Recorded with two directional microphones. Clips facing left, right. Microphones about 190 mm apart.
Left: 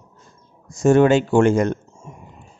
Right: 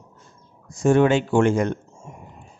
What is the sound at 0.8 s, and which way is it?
Speech, 45° left (ahead or behind).